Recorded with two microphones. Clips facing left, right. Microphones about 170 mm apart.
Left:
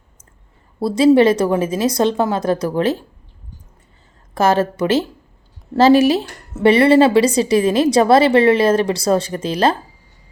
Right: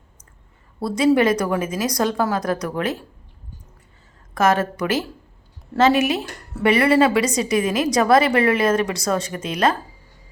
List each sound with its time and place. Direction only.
0.8 s speech: 30° left (ahead or behind)
4.4 s a woman's voice: 30° left (ahead or behind)